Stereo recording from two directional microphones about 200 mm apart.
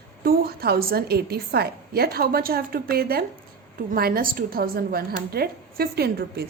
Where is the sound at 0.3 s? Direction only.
50° right (ahead or behind).